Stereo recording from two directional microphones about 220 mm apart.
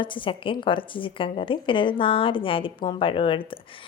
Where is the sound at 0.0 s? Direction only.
20° left (ahead or behind).